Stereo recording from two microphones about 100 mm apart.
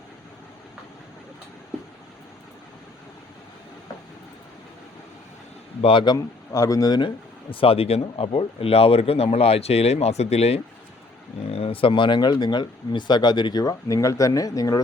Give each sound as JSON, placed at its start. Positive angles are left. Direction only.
{"t": 5.8, "sound": "speech", "side_deg": 60}
{"t": 6.1, "sound": "speech", "side_deg": 35}
{"t": 7.5, "sound": "speech", "side_deg": 70}
{"t": 11.5, "sound": "speech", "side_deg": 70}